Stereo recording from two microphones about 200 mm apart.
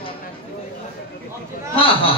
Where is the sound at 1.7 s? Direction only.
25° left (ahead or behind).